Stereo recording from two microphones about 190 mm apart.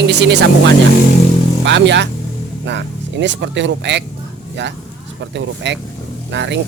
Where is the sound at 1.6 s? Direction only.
70° right (ahead or behind).